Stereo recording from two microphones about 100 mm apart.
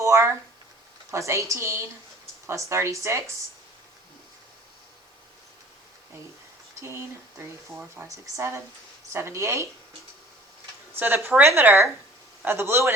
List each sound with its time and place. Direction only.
0.0 s a sound: 30° right (ahead or behind)
1.1 s a woman's voice: 30° right (ahead or behind)
6.8 s a woman's voice: 25° right (ahead or behind)
10.9 s a woman's voice: 20° right (ahead or behind)